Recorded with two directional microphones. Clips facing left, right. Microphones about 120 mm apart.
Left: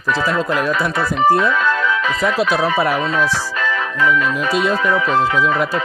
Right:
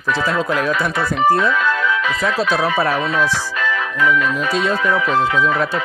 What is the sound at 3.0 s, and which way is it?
Speech, 30° left (ahead or behind).